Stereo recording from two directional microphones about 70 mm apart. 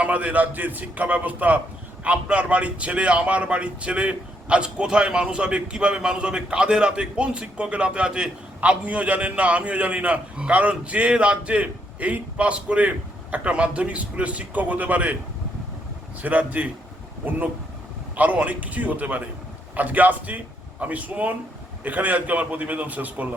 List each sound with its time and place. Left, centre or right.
0.0 s a man's voice: right
16.2 s a man's voice: right